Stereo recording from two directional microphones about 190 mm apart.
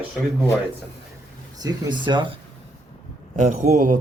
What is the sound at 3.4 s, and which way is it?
Speech, 40° right (ahead or behind).